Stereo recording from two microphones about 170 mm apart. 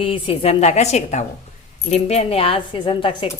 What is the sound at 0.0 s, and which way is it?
A woman's voice, 30° left (ahead or behind).